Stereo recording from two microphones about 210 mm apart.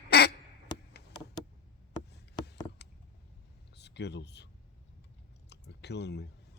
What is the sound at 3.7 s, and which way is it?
Speech, 55° left (ahead or behind).